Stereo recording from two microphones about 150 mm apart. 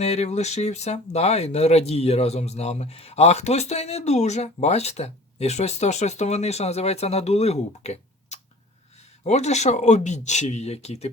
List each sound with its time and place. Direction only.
0.0 s speech: 45° left (ahead or behind)